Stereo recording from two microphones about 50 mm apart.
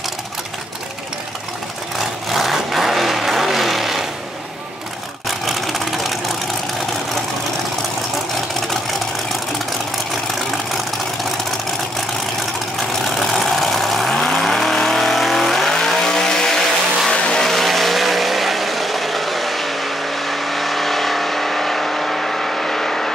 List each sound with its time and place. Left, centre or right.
2.0 s vehicle: centre
5.4 s vehicle: centre
13.2 s vehicle: centre
14.1 s vehicle: centre
17.5 s vehicle: centre